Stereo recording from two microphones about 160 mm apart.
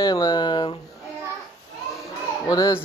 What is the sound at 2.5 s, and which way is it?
Speech, 25° left (ahead or behind).